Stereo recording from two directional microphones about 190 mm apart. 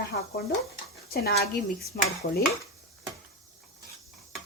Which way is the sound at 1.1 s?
55° left (ahead or behind).